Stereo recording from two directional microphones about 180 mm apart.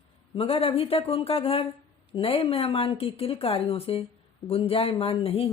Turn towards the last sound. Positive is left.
turn(degrees=30)  # may be behind; listen again after turning